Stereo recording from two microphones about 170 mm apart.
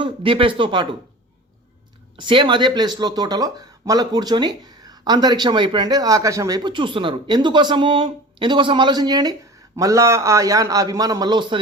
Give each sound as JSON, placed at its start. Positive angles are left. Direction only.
{"t": 0.0, "sound": "speech", "side_deg": -30}
{"t": 2.1, "sound": "speech", "side_deg": -30}